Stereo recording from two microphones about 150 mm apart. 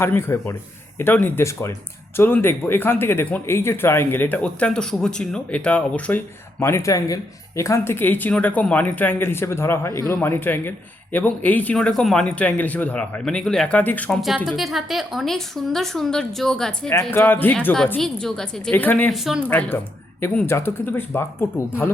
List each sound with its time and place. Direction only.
0.0 s speech: 15° left (ahead or behind)
14.2 s a woman's voice: centre (ahead or behind)
16.9 s speech: 20° left (ahead or behind)
19.1 s a woman's voice: 5° right (ahead or behind)
19.5 s speech: 10° left (ahead or behind)